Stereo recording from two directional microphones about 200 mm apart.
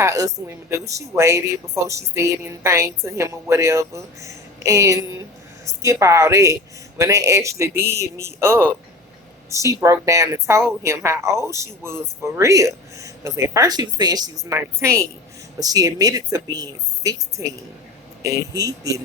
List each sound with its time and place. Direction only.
0.0 s speech: 15° right (ahead or behind)